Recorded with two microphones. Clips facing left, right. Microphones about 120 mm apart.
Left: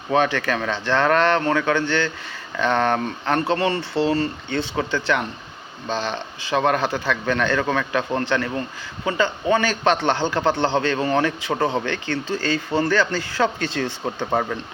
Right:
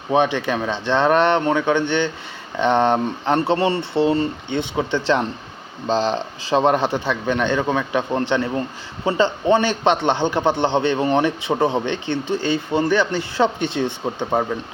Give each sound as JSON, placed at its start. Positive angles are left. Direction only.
{"t": 0.1, "sound": "a man's voice", "side_deg": -20}
{"t": 6.6, "sound": "a man's voice", "side_deg": -25}